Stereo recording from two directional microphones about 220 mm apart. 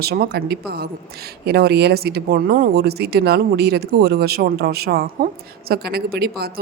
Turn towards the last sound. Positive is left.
turn(degrees=-45)  # may be behind; listen again after turning